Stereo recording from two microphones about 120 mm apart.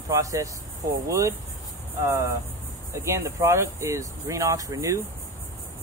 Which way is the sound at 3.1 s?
25° right (ahead or behind).